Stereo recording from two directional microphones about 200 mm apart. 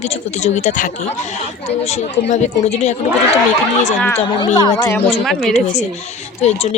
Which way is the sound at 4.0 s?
10° left (ahead or behind).